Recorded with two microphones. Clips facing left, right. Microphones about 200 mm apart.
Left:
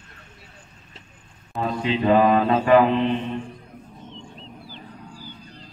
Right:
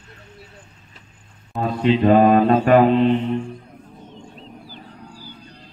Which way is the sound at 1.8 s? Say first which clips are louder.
Right 4 dB; 50° right (ahead or behind).